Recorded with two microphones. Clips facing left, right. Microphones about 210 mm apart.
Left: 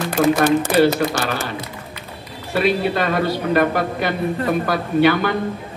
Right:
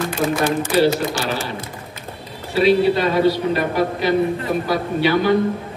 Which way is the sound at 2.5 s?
55° left (ahead or behind).